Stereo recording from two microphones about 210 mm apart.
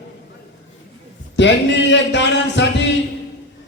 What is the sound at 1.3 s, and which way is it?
A man's voice, 55° left (ahead or behind).